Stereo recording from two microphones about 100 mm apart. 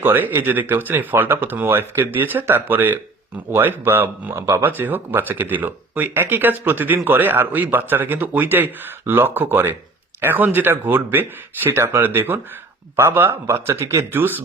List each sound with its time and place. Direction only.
0.0 s speech: 20° right (ahead or behind)